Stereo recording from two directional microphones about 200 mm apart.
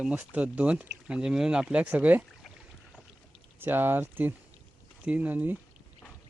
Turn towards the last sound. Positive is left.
turn(degrees=-10)  # may be behind; listen again after turning